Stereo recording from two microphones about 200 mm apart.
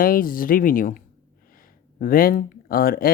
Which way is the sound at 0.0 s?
45° left (ahead or behind).